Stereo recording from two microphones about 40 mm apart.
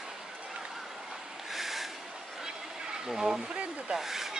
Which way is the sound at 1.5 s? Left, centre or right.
Centre.